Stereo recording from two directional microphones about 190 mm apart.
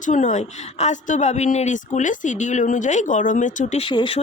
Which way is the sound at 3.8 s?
25° left (ahead or behind).